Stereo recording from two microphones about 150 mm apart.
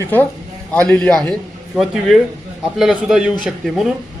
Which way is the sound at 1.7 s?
5° right (ahead or behind).